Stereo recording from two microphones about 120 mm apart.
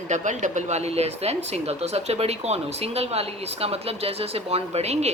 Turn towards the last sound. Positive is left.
turn(degrees=-65)  # may be behind; listen again after turning